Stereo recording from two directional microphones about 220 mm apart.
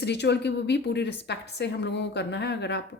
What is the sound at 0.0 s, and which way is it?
Speech, 50° left (ahead or behind).